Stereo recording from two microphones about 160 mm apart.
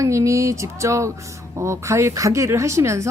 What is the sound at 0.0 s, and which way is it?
Speech, 20° right (ahead or behind).